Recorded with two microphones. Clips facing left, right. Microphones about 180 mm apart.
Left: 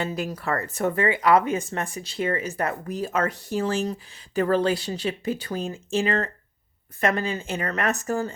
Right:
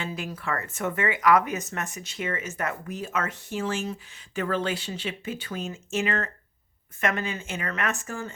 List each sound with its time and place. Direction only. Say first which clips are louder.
0.0 s speech: left 5 dB; 40° left (ahead or behind)